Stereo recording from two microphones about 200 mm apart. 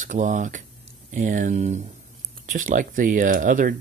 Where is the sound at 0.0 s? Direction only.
40° right (ahead or behind).